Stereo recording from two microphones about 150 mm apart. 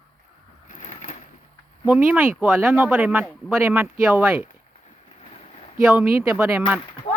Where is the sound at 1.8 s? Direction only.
10° right (ahead or behind).